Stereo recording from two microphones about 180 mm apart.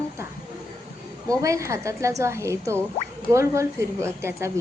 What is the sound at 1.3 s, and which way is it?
A woman's voice, 15° right (ahead or behind).